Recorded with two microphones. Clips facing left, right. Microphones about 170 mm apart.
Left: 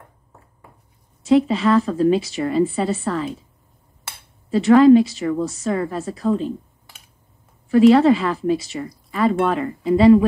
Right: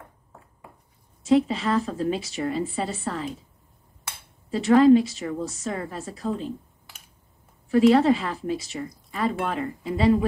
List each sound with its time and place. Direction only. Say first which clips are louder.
1.3 s a woman's voice: left 5 dB; 90° left
4.5 s a woman's voice: left 5 dB; 90° left
7.7 s a woman's voice: left 5 dB; 90° left